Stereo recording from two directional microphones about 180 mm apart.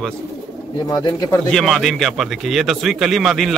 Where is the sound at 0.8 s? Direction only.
20° left (ahead or behind).